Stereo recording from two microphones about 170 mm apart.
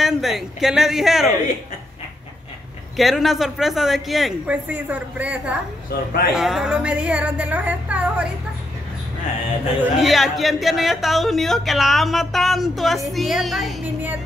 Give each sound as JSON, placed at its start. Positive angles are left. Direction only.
{"t": 0.0, "sound": "speech", "side_deg": 0}
{"t": 3.0, "sound": "speech", "side_deg": 0}
{"t": 5.9, "sound": "speech", "side_deg": 70}
{"t": 6.3, "sound": "speech", "side_deg": 0}
{"t": 9.8, "sound": "speech", "side_deg": 0}